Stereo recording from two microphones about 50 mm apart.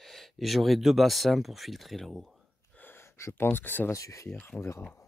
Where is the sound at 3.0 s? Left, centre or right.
Left.